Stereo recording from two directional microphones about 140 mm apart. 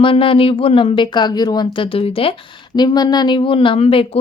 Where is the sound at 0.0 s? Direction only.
40° left (ahead or behind).